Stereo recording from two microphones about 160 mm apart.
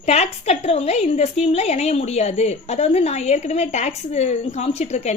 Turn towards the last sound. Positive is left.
turn(degrees=45)  # may be behind; listen again after turning